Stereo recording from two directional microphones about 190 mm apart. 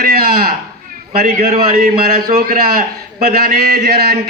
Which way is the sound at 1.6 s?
50° right (ahead or behind).